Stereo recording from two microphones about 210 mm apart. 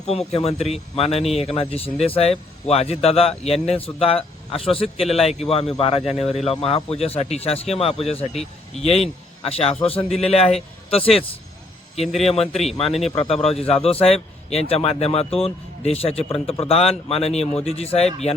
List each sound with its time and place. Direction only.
0.3 s a man's voice: 30° left (ahead or behind)
11.9 s a man's voice: centre (ahead or behind)
13.1 s a man's voice: 25° left (ahead or behind)